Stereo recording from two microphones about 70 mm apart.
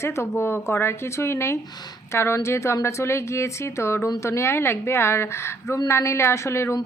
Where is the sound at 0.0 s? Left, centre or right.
Left.